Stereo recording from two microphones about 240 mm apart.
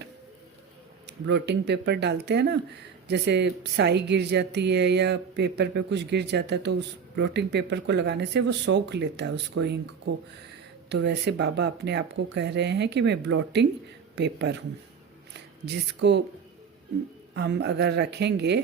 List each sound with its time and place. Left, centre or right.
1.0 s speech: right
17.3 s speech: right